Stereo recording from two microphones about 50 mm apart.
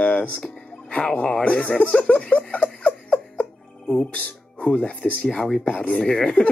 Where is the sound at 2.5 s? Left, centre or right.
Left.